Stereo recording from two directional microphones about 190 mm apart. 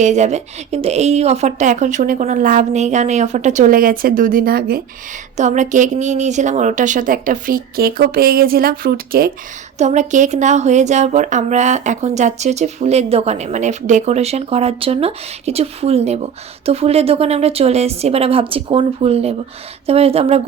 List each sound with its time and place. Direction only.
0.0 s speech: 35° right (ahead or behind)
5.4 s a woman's voice: 40° right (ahead or behind)
9.7 s speech: 40° right (ahead or behind)